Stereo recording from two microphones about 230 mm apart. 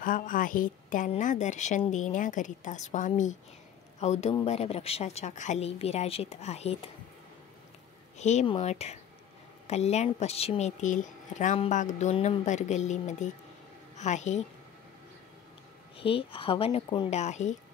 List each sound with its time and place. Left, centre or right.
0.0 s a woman's voice: left
8.2 s a woman's voice: left
16.0 s speech: left